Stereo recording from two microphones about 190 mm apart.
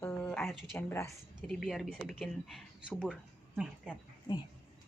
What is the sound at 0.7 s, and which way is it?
Speech, 15° left (ahead or behind).